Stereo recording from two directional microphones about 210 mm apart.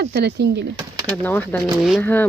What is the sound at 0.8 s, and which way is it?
Bird, 20° right (ahead or behind).